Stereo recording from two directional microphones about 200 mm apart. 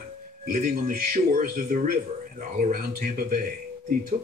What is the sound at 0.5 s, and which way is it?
Speech, 45° right (ahead or behind).